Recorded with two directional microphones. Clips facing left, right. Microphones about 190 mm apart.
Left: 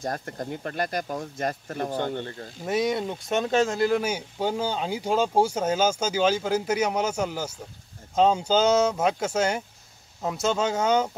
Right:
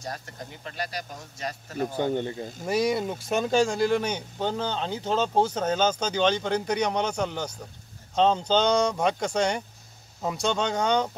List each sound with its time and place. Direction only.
0.0 s speech: 50° left (ahead or behind)
2.0 s speech: 15° right (ahead or behind)
2.6 s speech: centre (ahead or behind)